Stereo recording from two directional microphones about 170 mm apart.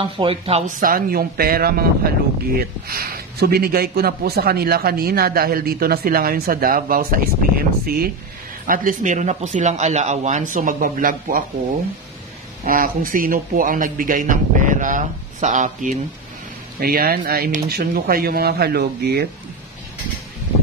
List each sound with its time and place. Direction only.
0.0 s speech: 30° right (ahead or behind)
0.7 s a man's voice: 55° right (ahead or behind)
12.6 s a man's voice: 55° right (ahead or behind)
16.8 s speech: 60° right (ahead or behind)